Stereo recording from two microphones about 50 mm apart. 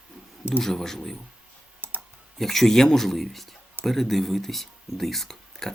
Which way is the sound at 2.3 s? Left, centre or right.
Centre.